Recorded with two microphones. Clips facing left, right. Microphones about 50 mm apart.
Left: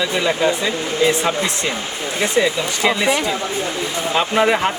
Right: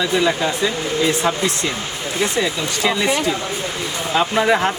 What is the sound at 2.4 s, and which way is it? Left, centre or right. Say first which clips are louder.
Speech: left 2 dB; centre.